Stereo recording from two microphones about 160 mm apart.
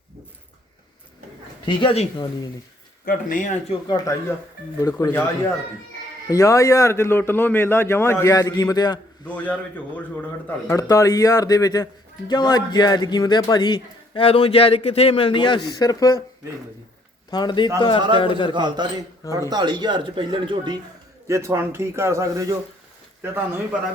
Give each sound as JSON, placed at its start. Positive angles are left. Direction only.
{"t": 1.6, "sound": "speech", "side_deg": 35}
{"t": 3.1, "sound": "speech", "side_deg": 60}
{"t": 3.7, "sound": "a man's voice", "side_deg": 25}
{"t": 9.2, "sound": "a man's voice", "side_deg": 10}
{"t": 10.7, "sound": "a man's voice", "side_deg": 20}
{"t": 17.3, "sound": "a man's voice", "side_deg": 25}
{"t": 18.5, "sound": "speech", "side_deg": -30}
{"t": 21.2, "sound": "a man's voice", "side_deg": -15}